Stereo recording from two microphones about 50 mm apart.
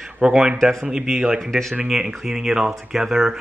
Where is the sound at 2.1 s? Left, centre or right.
Centre.